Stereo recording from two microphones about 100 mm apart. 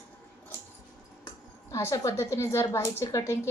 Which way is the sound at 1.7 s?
30° left (ahead or behind).